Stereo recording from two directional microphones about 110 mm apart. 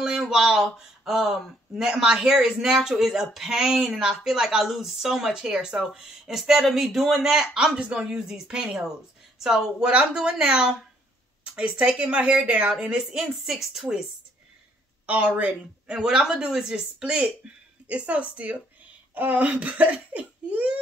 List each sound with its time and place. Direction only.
0.0 s a woman's voice: 5° right (ahead or behind)
15.0 s a woman's voice: 10° right (ahead or behind)